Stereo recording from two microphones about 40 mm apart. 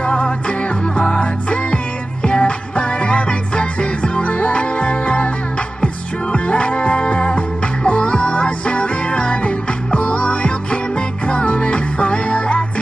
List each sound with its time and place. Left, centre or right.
0.0 s music: left
6.3 s music: left